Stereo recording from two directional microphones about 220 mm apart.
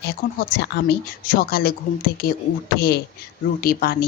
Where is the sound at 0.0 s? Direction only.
50° left (ahead or behind).